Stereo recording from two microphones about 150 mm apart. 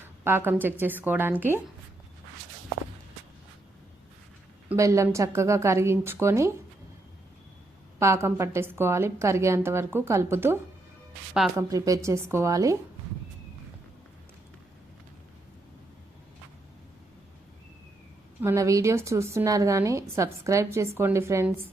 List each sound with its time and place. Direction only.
0.0 s a woman's voice: 15° right (ahead or behind)
4.8 s a woman's voice: 20° right (ahead or behind)
7.9 s a woman's voice: 20° right (ahead or behind)
18.4 s a woman's voice: 20° right (ahead or behind)